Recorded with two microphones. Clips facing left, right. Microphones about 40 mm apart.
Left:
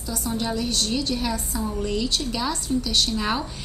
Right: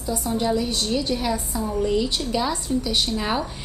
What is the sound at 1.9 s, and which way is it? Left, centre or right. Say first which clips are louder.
A woman's voice: right 3 dB; centre.